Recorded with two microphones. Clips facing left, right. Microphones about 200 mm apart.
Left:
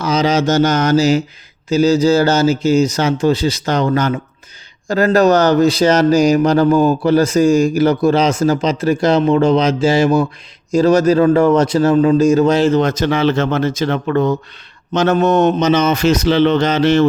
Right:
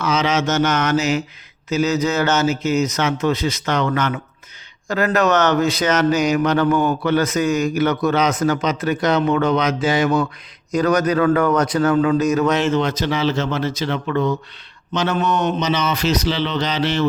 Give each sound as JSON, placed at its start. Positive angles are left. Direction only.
{"t": 0.0, "sound": "mantra", "side_deg": 35}
{"t": 1.7, "sound": "speech", "side_deg": 30}